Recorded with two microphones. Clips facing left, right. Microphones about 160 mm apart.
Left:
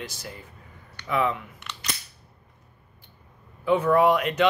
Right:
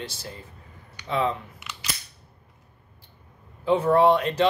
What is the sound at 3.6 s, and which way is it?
Speech, 30° right (ahead or behind).